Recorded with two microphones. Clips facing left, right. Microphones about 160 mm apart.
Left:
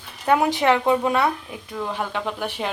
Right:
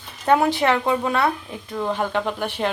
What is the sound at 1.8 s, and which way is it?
Speech, centre (ahead or behind).